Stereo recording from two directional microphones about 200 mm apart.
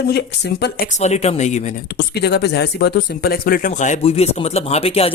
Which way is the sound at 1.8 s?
55° left (ahead or behind).